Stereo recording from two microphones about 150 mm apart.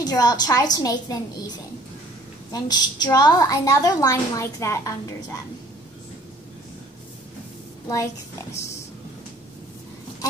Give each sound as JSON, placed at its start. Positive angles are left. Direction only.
{"t": 0.0, "sound": "a woman's voice", "side_deg": 25}
{"t": 2.5, "sound": "a woman's voice", "side_deg": 25}